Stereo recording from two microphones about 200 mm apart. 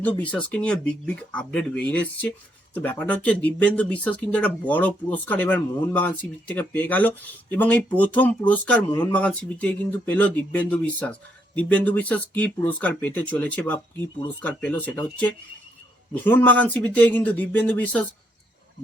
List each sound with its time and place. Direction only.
0.0 s speech: 5° left (ahead or behind)